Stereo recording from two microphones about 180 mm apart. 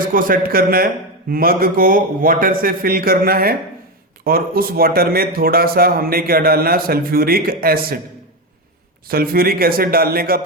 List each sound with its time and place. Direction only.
0.0 s a man's voice: 50° right (ahead or behind)
9.0 s speech: 55° right (ahead or behind)